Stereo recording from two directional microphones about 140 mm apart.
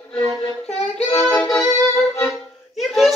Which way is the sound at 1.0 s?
15° left (ahead or behind).